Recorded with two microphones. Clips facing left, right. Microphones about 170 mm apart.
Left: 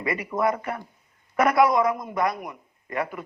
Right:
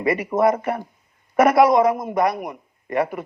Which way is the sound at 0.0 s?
35° right (ahead or behind).